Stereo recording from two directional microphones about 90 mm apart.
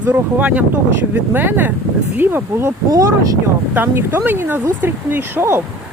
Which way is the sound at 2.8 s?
40° right (ahead or behind).